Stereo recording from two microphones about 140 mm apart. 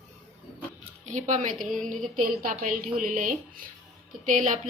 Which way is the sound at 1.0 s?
60° right (ahead or behind).